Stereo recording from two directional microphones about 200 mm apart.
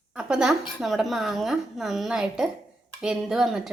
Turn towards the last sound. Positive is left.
turn(degrees=0)  # may be behind; listen again after turning